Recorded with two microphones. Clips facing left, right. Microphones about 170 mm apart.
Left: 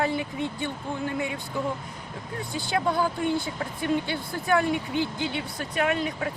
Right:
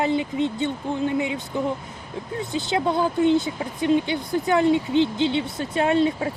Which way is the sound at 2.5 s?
20° right (ahead or behind).